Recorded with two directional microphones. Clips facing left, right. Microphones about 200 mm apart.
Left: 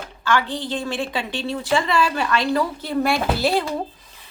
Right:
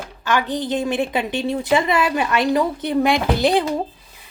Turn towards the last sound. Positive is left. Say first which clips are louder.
# right 3 dB
turn(degrees=-15)  # may be behind; listen again after turning